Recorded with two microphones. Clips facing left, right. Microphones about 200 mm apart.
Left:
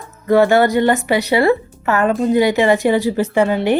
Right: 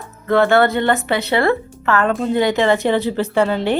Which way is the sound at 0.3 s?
15° left (ahead or behind).